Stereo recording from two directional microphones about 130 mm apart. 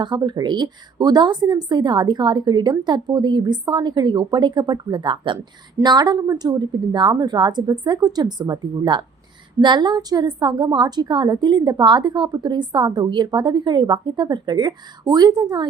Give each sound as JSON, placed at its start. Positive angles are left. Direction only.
{"t": 0.0, "sound": "a woman's voice", "side_deg": -35}